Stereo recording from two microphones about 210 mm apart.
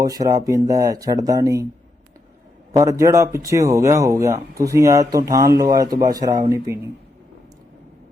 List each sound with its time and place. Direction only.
0.0 s speech: 15° right (ahead or behind)
2.7 s speech: 15° right (ahead or behind)